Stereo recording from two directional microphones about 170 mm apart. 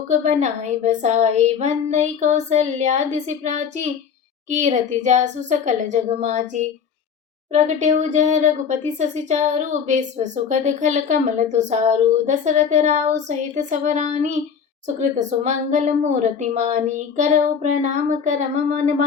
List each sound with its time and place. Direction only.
0.1 s speech: 45° right (ahead or behind)